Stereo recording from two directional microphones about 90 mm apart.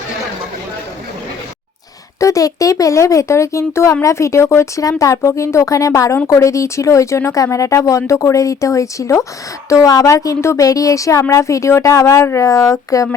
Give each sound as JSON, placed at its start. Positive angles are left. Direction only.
{"t": 2.1, "sound": "a woman's voice", "side_deg": 35}